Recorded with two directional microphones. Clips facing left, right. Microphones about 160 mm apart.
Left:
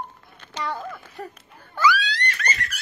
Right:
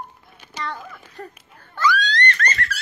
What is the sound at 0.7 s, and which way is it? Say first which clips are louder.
Speech: left 3 dB; 10° left (ahead or behind).